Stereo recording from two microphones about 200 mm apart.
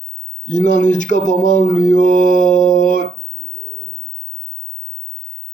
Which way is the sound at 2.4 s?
40° left (ahead or behind).